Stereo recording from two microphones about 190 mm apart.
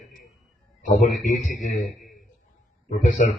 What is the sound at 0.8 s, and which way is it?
Speech, 40° left (ahead or behind).